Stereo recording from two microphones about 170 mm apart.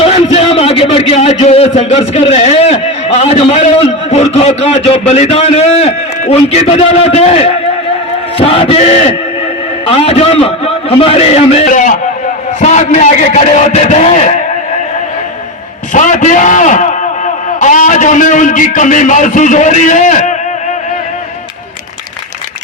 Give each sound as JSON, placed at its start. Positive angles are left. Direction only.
{"t": 0.0, "sound": "a man's voice", "side_deg": 35}
{"t": 15.9, "sound": "a man's voice", "side_deg": 50}